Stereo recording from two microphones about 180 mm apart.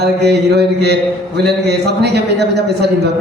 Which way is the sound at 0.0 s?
70° right (ahead or behind).